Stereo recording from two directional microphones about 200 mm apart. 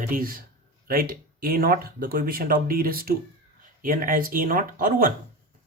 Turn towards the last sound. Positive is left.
turn(degrees=-45)  # may be behind; listen again after turning